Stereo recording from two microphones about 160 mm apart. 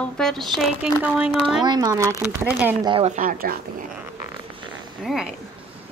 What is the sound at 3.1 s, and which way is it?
Speech, 60° right (ahead or behind).